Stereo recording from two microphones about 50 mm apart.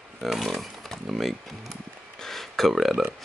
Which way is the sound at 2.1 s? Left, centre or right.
Centre.